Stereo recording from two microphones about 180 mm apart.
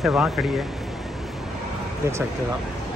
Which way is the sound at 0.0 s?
5° right (ahead or behind).